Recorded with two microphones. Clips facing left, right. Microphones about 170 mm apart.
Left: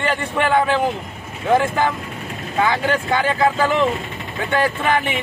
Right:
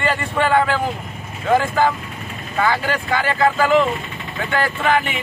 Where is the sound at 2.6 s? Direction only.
15° left (ahead or behind).